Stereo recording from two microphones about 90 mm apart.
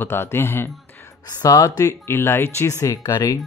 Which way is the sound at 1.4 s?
50° left (ahead or behind).